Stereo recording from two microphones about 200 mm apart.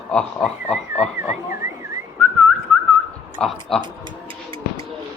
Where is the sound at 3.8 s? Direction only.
25° right (ahead or behind).